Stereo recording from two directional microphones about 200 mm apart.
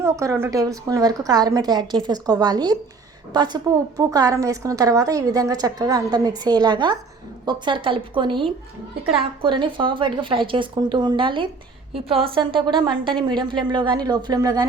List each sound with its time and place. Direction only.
0.0 s a woman's voice: 15° right (ahead or behind)